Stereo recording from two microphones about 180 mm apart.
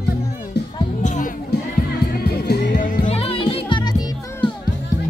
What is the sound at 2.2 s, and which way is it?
Music, 65° left (ahead or behind).